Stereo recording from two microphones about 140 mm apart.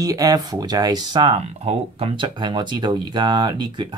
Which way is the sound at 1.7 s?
45° right (ahead or behind).